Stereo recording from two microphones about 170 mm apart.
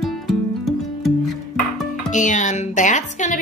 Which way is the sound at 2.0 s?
45° left (ahead or behind).